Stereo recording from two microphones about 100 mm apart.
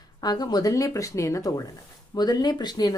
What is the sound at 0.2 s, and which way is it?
A woman's voice, 45° left (ahead or behind).